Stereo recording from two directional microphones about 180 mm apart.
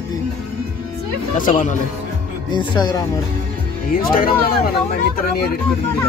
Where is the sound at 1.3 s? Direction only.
45° left (ahead or behind).